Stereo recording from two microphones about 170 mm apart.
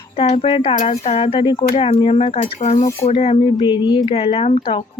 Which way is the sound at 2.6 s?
45° left (ahead or behind).